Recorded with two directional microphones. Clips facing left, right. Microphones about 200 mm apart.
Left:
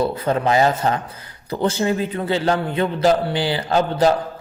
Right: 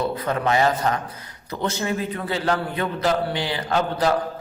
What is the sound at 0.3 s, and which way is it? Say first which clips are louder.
A man's voice: left 3 dB; 30° left (ahead or behind).